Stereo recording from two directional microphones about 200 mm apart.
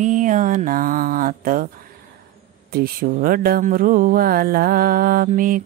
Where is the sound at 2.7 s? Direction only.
50° right (ahead or behind).